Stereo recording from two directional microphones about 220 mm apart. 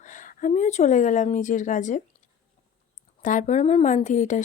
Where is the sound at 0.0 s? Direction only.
35° left (ahead or behind).